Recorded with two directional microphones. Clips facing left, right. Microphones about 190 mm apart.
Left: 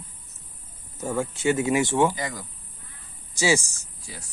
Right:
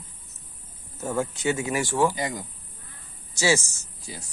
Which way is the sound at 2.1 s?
20° right (ahead or behind).